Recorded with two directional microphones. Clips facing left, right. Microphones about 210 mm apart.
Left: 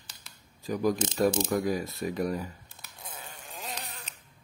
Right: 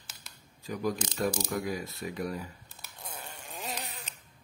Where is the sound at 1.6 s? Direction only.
40° left (ahead or behind).